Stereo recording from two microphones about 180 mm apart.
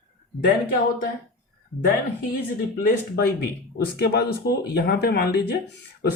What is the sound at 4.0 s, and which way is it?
Speech, 60° left (ahead or behind).